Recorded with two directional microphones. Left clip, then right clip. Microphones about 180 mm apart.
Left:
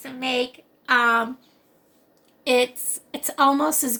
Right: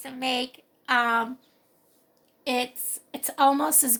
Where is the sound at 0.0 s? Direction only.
45° right (ahead or behind).